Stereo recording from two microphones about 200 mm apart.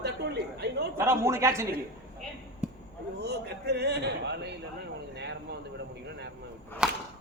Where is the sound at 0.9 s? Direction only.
15° right (ahead or behind).